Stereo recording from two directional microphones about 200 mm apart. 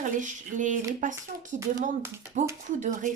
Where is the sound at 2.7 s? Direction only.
40° right (ahead or behind).